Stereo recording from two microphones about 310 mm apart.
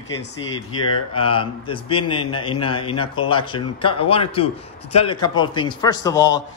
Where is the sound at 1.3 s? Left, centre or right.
Centre.